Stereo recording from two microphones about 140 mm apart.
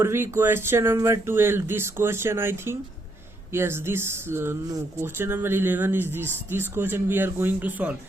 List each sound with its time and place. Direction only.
0.0 s speech: 20° right (ahead or behind)